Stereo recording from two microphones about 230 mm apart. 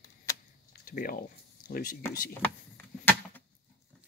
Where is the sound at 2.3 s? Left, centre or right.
Centre.